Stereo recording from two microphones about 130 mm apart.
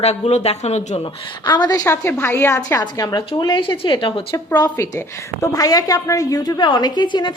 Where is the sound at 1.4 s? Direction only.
35° left (ahead or behind); by 2.8 s 15° left (ahead or behind).